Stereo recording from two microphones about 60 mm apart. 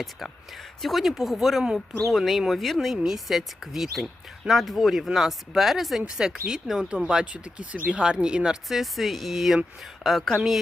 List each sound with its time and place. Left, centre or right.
0.8 s speech: centre
2.1 s speech: centre
8.7 s speech: centre